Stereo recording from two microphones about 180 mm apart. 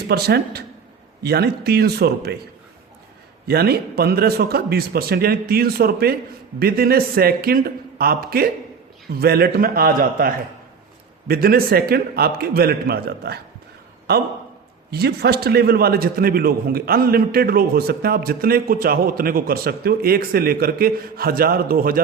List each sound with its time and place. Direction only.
0.1 s a man's voice: 60° right (ahead or behind)
3.4 s a man's voice: 60° right (ahead or behind)